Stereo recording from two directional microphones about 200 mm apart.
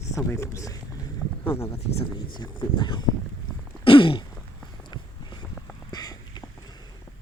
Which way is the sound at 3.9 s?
25° left (ahead or behind).